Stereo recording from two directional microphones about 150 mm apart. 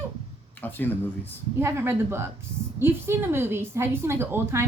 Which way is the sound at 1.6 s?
15° right (ahead or behind).